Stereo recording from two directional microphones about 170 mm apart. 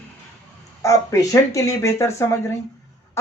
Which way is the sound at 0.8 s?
20° left (ahead or behind).